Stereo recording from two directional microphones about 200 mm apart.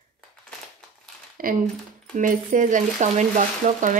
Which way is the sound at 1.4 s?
45° right (ahead or behind).